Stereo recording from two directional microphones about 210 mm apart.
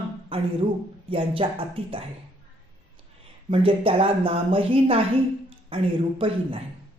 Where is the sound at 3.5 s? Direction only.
25° right (ahead or behind).